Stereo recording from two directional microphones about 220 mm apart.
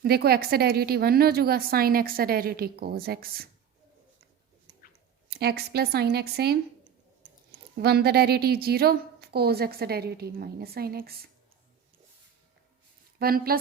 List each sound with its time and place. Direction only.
0.0 s a woman's voice: 45° right (ahead or behind)
5.4 s a woman's voice: 45° right (ahead or behind)
7.8 s a woman's voice: 45° right (ahead or behind)
13.1 s speech: 45° right (ahead or behind)